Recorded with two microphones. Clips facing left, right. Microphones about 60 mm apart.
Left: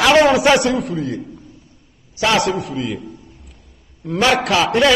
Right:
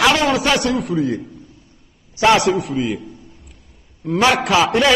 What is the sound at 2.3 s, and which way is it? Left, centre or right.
Speech, centre.